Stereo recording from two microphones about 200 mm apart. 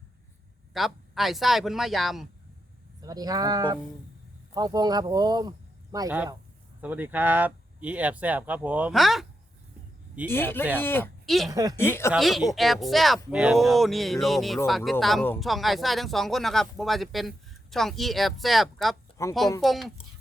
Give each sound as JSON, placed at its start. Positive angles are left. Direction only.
{"t": 0.7, "sound": "speech", "side_deg": 0}
{"t": 3.0, "sound": "speech", "side_deg": -20}
{"t": 10.2, "sound": "speech", "side_deg": 10}
{"t": 11.5, "sound": "speech", "side_deg": -20}
{"t": 11.8, "sound": "speech", "side_deg": 10}
{"t": 12.1, "sound": "speech", "side_deg": 0}
{"t": 19.2, "sound": "speech", "side_deg": 15}
{"t": 19.6, "sound": "speech", "side_deg": 0}